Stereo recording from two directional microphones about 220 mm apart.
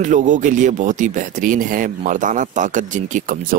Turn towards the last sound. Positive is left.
turn(degrees=-35)  # may be behind; listen again after turning